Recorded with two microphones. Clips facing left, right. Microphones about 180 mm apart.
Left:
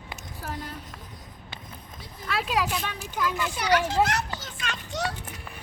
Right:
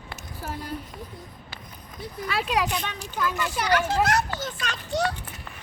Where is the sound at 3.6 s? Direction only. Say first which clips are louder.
Even; 50° right (ahead or behind).